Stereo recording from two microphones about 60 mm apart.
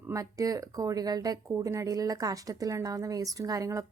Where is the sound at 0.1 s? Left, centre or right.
Right.